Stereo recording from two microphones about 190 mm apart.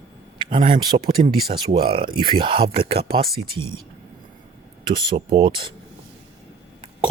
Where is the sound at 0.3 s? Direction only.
25° right (ahead or behind).